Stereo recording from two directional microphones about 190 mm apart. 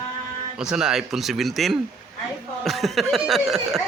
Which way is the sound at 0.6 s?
5° right (ahead or behind).